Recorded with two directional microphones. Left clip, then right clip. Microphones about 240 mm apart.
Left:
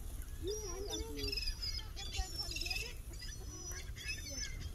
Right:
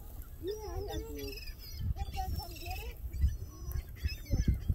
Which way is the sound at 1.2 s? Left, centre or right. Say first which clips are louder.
Left 4 dB; centre.